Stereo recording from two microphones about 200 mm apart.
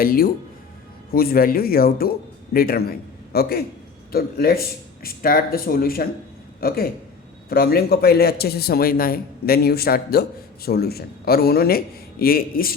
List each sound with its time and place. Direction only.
0.0 s a man's voice: 45° left (ahead or behind)